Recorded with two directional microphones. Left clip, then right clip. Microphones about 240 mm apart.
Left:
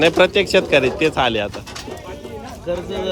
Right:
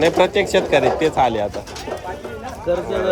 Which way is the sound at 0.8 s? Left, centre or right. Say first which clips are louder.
Right 1 dB; centre.